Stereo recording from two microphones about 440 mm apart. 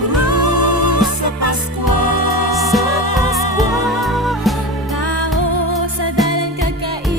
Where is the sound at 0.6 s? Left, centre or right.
Right.